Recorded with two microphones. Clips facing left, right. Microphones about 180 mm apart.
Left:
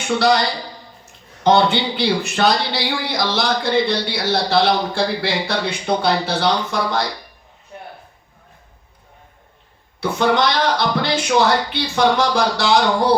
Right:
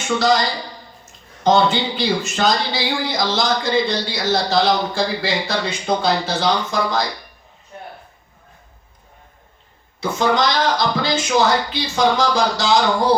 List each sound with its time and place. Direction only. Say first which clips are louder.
0.2 s a man's voice: left 1 dB; 65° left (ahead or behind)
1.5 s a man's voice: left 1 dB; 65° left (ahead or behind)
10.0 s a man's voice: left 1 dB; 60° left (ahead or behind)